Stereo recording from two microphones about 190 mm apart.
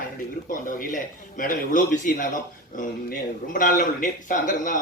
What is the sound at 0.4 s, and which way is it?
Speech, 45° left (ahead or behind).